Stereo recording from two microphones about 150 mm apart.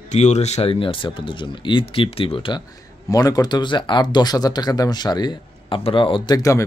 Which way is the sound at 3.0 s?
25° left (ahead or behind).